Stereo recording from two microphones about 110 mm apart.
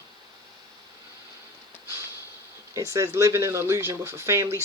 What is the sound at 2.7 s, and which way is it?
Speech, 25° right (ahead or behind).